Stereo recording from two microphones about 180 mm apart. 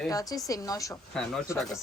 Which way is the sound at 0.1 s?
20° left (ahead or behind).